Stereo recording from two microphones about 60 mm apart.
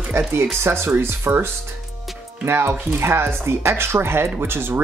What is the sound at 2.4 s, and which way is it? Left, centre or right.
Speech, right.